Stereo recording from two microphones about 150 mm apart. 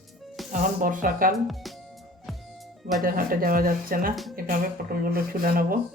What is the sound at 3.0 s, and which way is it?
Speech, 75° right (ahead or behind).